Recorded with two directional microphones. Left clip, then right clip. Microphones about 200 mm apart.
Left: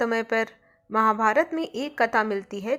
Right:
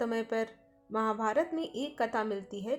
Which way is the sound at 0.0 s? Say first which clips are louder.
Left 8 dB; 20° left (ahead or behind).